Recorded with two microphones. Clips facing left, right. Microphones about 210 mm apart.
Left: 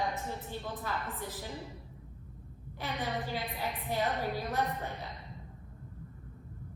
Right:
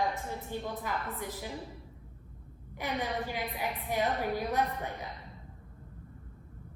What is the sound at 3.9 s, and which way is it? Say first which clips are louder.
Speech: right 2 dB; 15° right (ahead or behind).